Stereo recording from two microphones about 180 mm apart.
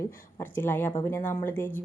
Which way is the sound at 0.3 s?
10° left (ahead or behind).